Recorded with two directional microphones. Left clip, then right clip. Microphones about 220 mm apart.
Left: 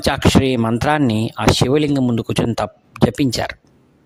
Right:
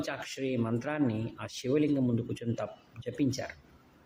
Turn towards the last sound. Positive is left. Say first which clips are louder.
# left 16 dB
turn(degrees=50)  # may be behind; listen again after turning